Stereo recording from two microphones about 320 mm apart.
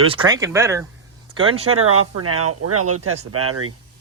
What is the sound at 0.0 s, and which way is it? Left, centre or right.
Speech, centre.